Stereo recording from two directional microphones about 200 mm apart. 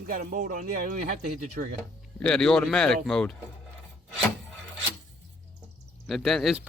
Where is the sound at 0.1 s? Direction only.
45° right (ahead or behind).